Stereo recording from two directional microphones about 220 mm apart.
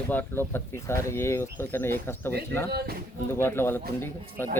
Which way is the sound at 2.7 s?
45° right (ahead or behind).